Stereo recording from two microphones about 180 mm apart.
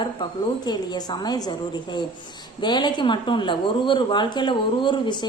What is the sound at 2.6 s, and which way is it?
Speech, 25° left (ahead or behind).